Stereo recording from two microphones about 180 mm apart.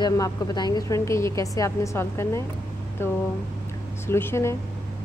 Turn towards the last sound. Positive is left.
turn(degrees=15)  # may be behind; listen again after turning